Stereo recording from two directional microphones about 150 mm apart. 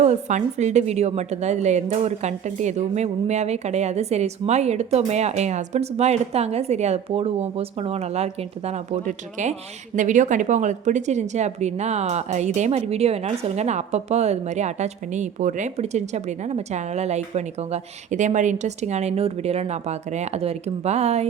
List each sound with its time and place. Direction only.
0.0 s a woman's voice: 50° right (ahead or behind)